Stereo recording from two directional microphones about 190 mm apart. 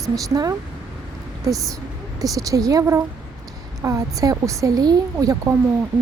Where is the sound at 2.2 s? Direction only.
20° right (ahead or behind).